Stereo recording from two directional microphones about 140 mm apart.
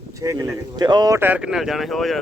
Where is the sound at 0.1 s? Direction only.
25° right (ahead or behind).